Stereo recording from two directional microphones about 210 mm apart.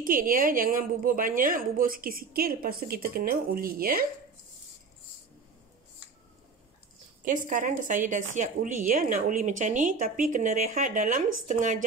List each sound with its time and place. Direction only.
0.0 s a woman's voice: 40° right (ahead or behind)
7.2 s a woman's voice: 40° right (ahead or behind)